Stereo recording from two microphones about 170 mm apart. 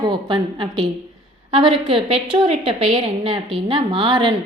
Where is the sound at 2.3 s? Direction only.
30° right (ahead or behind).